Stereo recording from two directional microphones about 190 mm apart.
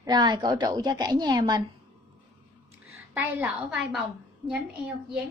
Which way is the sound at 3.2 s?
10° right (ahead or behind).